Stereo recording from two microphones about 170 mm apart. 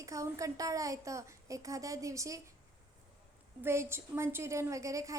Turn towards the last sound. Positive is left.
turn(degrees=-20)  # may be behind; listen again after turning